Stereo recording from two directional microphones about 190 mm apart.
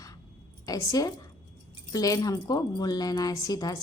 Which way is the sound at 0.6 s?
20° left (ahead or behind).